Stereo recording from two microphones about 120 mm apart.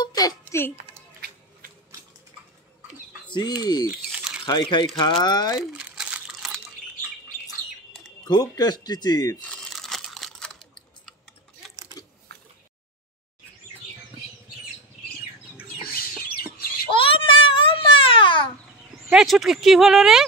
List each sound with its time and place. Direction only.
0.0 s music: 30° left (ahead or behind)
3.3 s speech: 35° left (ahead or behind)
4.1 s a sound: 5° right (ahead or behind)
4.5 s speech: 40° left (ahead or behind)
5.6 s crumpling: 10° right (ahead or behind)
7.4 s bird: centre (ahead or behind)
8.3 s speech: 35° left (ahead or behind)
9.4 s crumpling: 5° left (ahead or behind)
12.0 s biting: 35° left (ahead or behind)
16.9 s babbling: 50° left (ahead or behind)
19.0 s speech: 5° right (ahead or behind)